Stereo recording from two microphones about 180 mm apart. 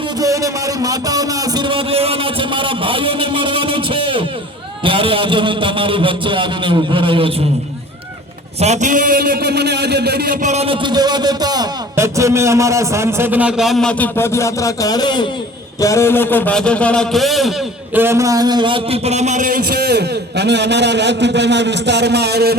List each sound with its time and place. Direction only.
0.2 s a sound: 20° right (ahead or behind)
4.8 s a man's voice: 30° right (ahead or behind)
8.6 s a man's voice: 40° right (ahead or behind); by 10.3 s 65° right (ahead or behind)
10.4 s a man's voice: 35° right (ahead or behind); by 17.5 s centre (ahead or behind)
17.9 s a man's voice: 15° right (ahead or behind); by 22.5 s 65° right (ahead or behind)